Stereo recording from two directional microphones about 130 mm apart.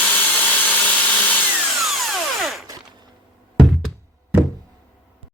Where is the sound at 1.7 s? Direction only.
Centre (ahead or behind).